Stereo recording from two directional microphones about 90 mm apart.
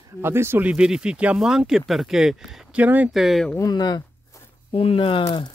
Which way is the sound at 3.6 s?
50° left (ahead or behind).